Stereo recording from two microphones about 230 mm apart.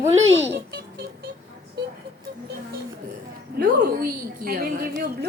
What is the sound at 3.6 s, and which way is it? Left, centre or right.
A woman's voice, right.